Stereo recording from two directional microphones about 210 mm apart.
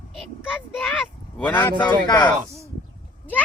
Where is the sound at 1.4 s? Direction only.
10° left (ahead or behind).